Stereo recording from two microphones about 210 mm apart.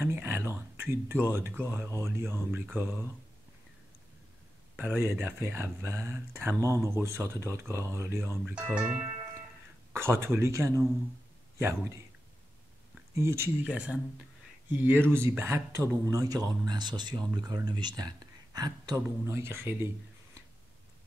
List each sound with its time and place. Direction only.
0.0 s speech: 10° right (ahead or behind)
4.7 s speech: 10° right (ahead or behind)
9.9 s speech: 10° right (ahead or behind)
13.1 s speech: 10° right (ahead or behind)